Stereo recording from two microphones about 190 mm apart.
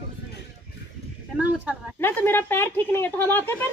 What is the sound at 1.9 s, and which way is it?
Speech, 10° left (ahead or behind).